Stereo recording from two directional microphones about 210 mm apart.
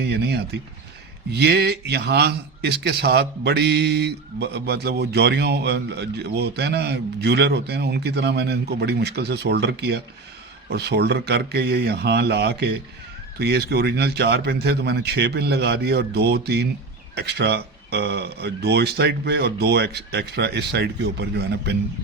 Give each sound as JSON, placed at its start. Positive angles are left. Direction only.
{"t": 0.0, "sound": "a man's voice", "side_deg": -50}